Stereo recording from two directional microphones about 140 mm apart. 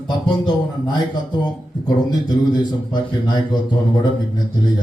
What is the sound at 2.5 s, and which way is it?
Speech, 30° left (ahead or behind).